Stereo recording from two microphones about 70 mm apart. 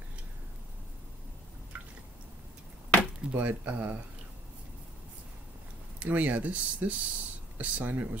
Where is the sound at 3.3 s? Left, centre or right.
Right.